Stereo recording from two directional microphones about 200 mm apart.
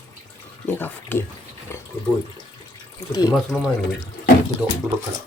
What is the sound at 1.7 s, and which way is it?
Water, 15° left (ahead or behind).